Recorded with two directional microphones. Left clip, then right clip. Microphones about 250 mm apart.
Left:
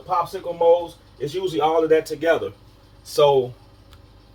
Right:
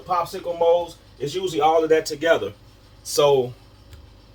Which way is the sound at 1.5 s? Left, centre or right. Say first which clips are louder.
Even; centre.